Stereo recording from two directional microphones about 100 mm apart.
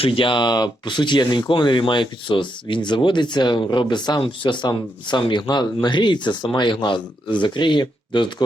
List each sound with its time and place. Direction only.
0.0 s speech: 60° left (ahead or behind)